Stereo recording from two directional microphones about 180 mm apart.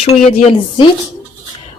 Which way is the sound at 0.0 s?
35° left (ahead or behind).